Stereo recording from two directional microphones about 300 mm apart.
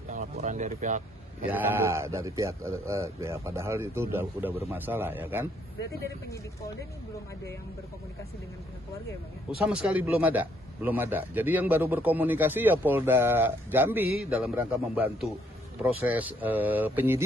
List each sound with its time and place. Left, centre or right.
0.1 s speech: right
1.5 s a man's voice: centre
9.7 s a man's voice: centre